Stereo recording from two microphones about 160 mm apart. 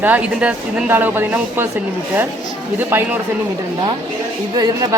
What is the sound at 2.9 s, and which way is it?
Speech, 15° right (ahead or behind).